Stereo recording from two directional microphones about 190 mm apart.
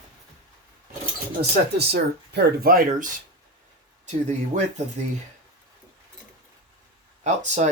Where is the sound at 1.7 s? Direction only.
60° right (ahead or behind).